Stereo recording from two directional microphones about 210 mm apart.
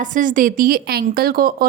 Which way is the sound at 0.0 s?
40° right (ahead or behind).